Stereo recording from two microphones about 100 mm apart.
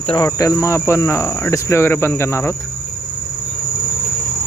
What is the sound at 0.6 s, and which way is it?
Speech, 30° left (ahead or behind).